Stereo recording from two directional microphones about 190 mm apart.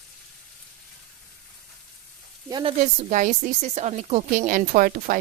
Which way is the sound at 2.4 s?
20° right (ahead or behind).